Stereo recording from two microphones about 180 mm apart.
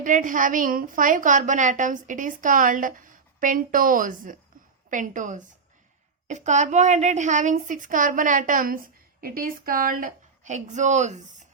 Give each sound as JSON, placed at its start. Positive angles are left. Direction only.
{"t": 0.0, "sound": "a woman's voice", "side_deg": -45}